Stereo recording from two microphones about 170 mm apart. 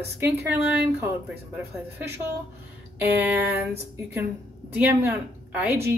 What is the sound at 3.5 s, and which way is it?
Speech, 10° right (ahead or behind).